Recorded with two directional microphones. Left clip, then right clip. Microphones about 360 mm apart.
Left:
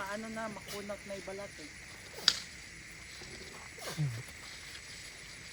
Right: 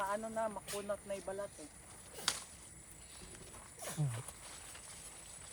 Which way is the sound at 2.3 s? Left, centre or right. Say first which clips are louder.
Left 9 dB; centre.